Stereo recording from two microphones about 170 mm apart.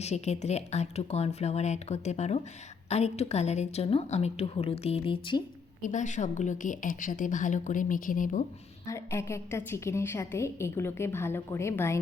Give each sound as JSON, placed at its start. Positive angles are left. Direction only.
{"t": 0.0, "sound": "a woman's voice", "side_deg": 40}
{"t": 5.8, "sound": "a woman's voice", "side_deg": 45}
{"t": 8.9, "sound": "a woman's voice", "side_deg": 15}